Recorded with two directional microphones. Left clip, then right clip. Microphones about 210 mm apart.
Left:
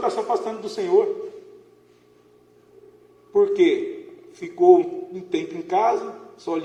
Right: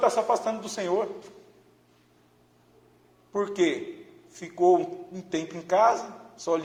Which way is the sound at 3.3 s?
35° right (ahead or behind).